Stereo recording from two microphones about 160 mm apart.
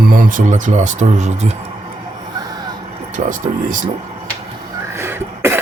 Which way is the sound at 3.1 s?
55° right (ahead or behind).